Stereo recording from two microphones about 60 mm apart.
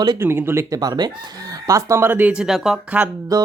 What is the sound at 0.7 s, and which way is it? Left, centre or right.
Speech, right.